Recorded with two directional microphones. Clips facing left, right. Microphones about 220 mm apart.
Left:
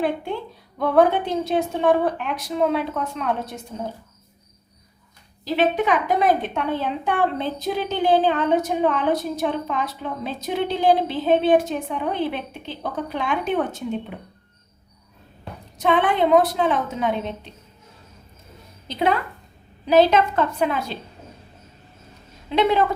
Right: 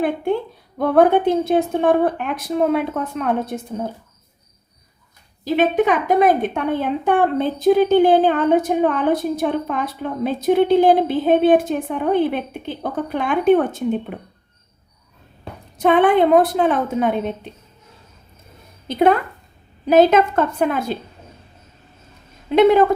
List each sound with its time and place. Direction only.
0.8 s a woman's voice: 50° right (ahead or behind)
5.5 s a woman's voice: 50° right (ahead or behind)
15.8 s a woman's voice: 55° right (ahead or behind)
18.9 s a woman's voice: 50° right (ahead or behind)
22.4 s a woman's voice: 50° right (ahead or behind)